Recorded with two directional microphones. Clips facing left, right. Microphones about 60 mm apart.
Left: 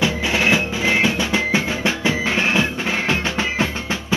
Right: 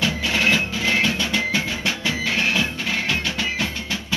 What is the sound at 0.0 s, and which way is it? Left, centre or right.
Music, centre.